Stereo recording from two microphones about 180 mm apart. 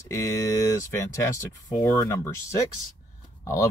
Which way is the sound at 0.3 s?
15° left (ahead or behind).